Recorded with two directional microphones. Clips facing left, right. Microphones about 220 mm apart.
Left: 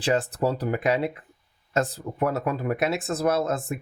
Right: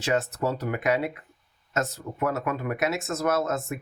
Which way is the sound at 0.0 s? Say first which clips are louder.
Left 2 dB; 30° left (ahead or behind).